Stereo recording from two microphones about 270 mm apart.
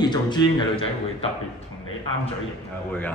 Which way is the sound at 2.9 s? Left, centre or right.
Centre.